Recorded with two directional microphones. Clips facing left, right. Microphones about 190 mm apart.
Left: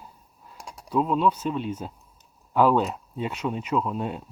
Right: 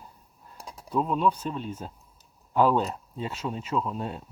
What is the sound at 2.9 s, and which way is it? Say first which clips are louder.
Speech: left 3 dB; 15° left (ahead or behind).